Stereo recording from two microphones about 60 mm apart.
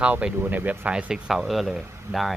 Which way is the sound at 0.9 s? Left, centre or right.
Centre.